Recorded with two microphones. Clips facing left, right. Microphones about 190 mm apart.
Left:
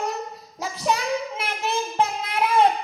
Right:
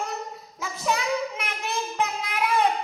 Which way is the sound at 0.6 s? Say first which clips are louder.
Left 2 dB; 30° left (ahead or behind).